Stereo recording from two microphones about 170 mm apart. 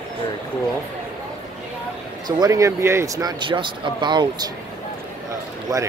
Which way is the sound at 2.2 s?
25° right (ahead or behind).